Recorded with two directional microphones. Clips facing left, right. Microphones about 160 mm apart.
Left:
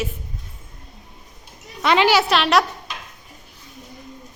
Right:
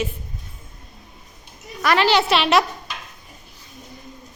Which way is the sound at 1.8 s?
20° left (ahead or behind).